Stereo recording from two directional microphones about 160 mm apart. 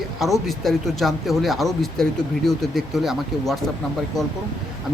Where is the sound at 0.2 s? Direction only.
Centre (ahead or behind).